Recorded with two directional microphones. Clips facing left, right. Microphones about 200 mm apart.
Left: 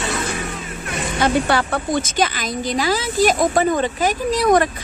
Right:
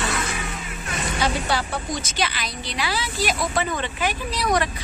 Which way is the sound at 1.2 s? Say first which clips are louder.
Left 7 dB; 55° left (ahead or behind).